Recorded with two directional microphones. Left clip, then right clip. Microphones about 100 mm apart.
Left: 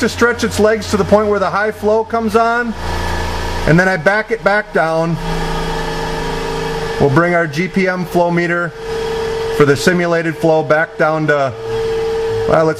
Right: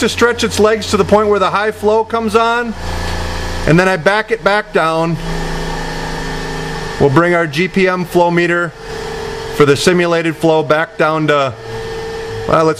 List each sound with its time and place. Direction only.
0.0 s a man's voice: 15° right (ahead or behind)
3.6 s a man's voice: 20° right (ahead or behind)
7.2 s a man's voice: 20° right (ahead or behind)